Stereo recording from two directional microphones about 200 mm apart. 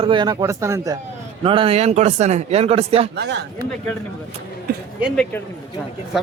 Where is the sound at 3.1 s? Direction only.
55° right (ahead or behind).